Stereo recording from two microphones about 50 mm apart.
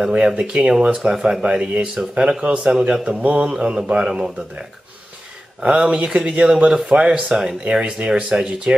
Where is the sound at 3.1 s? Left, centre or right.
Right.